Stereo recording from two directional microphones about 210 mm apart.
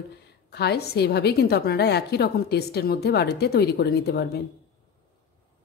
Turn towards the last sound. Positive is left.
turn(degrees=50)  # may be behind; listen again after turning